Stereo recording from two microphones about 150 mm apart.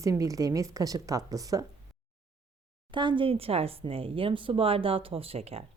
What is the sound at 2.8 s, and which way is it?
Speech, 30° right (ahead or behind).